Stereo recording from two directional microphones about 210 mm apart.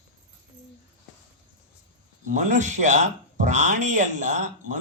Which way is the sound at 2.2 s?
35° right (ahead or behind).